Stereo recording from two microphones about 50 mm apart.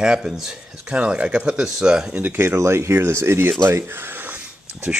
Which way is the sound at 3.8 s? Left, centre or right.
Right.